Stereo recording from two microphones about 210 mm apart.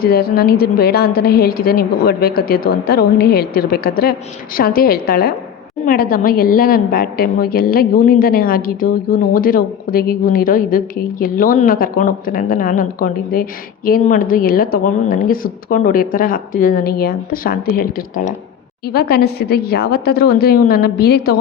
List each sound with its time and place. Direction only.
0.0 s a woman's voice: 45° left (ahead or behind)